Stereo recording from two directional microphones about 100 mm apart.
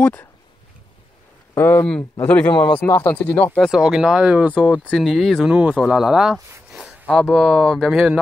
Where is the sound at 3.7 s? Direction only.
5° right (ahead or behind).